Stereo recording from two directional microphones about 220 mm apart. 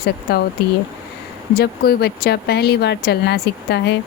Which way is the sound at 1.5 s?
45° left (ahead or behind).